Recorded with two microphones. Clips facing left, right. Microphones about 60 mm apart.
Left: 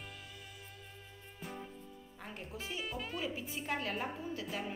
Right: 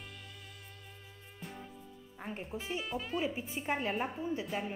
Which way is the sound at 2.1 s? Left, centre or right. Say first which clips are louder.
Right 5 dB; right.